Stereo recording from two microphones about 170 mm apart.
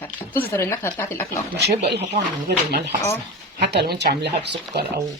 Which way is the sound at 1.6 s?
75° right (ahead or behind).